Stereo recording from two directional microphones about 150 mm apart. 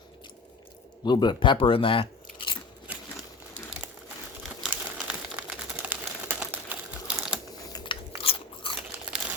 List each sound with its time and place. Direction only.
1.0 s speech: 30° left (ahead or behind)
4.4 s crumpling: 5° right (ahead or behind)
7.7 s biting: 25° left (ahead or behind)
8.1 s crunch: 40° left (ahead or behind)